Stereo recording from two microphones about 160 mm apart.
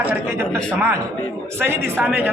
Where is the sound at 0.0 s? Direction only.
10° right (ahead or behind).